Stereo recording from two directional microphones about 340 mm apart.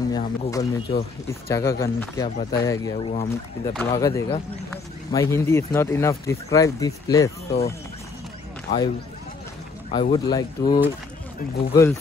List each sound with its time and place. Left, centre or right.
0.1 s speech: centre